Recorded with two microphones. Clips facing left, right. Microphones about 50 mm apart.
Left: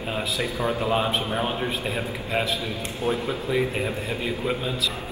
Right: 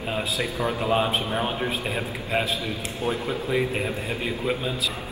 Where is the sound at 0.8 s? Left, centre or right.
Centre.